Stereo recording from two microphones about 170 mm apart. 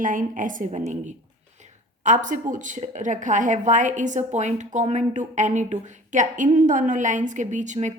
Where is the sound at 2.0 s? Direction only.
45° right (ahead or behind).